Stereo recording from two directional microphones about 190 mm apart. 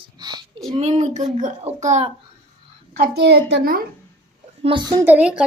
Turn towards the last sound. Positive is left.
turn(degrees=-5)  # may be behind; listen again after turning